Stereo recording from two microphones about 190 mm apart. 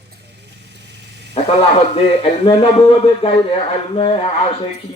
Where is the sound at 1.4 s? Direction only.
35° left (ahead or behind).